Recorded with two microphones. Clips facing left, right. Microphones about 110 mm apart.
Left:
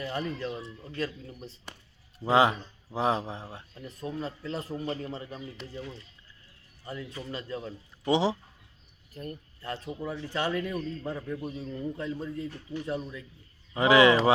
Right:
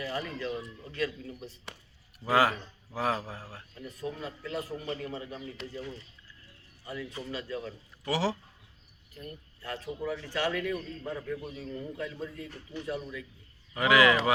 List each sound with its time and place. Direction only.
0.0 s speech: 25° left (ahead or behind)
2.1 s speech: 25° left (ahead or behind)
5.6 s speech: centre (ahead or behind)
6.8 s speech: 25° left (ahead or behind)
9.6 s speech: 25° left (ahead or behind)